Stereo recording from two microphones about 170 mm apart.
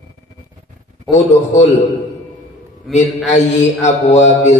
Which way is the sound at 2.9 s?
Centre (ahead or behind).